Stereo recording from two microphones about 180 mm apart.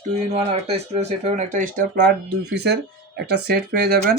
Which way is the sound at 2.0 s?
70° right (ahead or behind).